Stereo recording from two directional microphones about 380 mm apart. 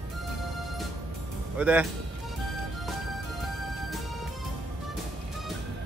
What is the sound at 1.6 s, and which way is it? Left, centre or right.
Speech, centre.